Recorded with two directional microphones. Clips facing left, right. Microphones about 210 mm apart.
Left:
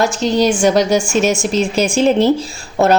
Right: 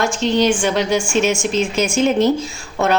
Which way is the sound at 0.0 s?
40° left (ahead or behind).